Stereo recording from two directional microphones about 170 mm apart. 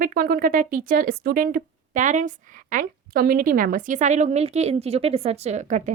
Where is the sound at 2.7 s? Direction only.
60° right (ahead or behind).